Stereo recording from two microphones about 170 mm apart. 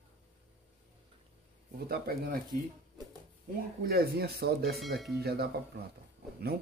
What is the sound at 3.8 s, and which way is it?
Speech, 65° right (ahead or behind).